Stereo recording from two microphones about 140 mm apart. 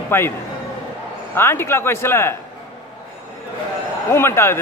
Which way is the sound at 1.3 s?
15° left (ahead or behind).